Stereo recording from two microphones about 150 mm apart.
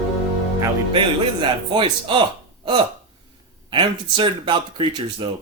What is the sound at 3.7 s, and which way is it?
Speech, 35° right (ahead or behind).